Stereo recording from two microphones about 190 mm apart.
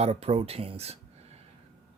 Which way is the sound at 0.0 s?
35° right (ahead or behind).